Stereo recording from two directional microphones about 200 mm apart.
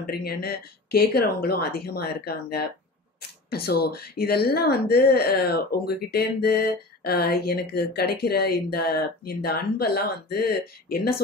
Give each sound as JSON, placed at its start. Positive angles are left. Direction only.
{"t": 0.0, "sound": "speech", "side_deg": 50}